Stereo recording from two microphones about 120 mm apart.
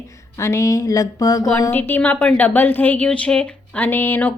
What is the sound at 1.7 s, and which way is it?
A woman's voice, 15° left (ahead or behind).